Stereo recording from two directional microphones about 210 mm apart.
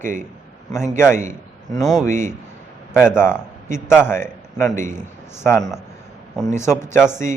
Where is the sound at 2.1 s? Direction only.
35° right (ahead or behind).